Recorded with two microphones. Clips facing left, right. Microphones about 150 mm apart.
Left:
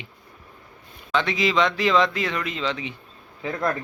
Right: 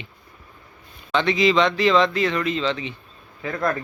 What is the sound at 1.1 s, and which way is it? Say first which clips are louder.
Speech: right 3 dB; 5° left (ahead or behind).